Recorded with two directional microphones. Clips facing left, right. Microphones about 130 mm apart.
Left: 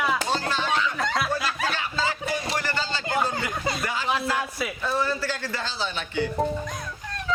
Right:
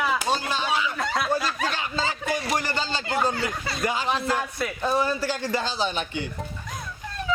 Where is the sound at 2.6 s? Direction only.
15° right (ahead or behind).